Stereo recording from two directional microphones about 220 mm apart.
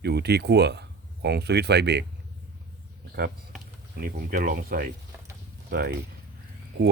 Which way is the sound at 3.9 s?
40° right (ahead or behind).